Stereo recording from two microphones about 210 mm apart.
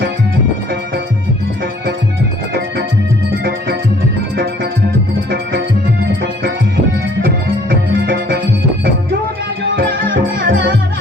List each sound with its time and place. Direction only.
5.3 s music: 55° right (ahead or behind)
7.2 s music: 50° right (ahead or behind)
10.4 s music: 55° right (ahead or behind)